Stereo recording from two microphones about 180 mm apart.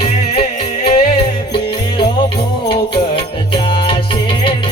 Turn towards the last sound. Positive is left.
turn(degrees=30)  # may be behind; listen again after turning